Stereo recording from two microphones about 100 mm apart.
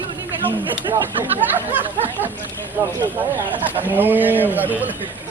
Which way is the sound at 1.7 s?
20° right (ahead or behind).